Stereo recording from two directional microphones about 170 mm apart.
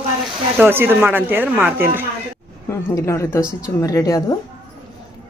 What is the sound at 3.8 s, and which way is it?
Speech, 20° left (ahead or behind).